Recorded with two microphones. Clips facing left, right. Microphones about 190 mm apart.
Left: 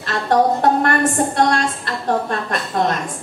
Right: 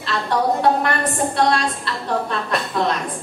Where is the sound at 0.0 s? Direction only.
50° left (ahead or behind).